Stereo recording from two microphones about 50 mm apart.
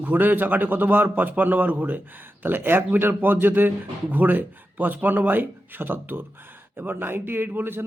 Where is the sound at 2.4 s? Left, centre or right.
Right.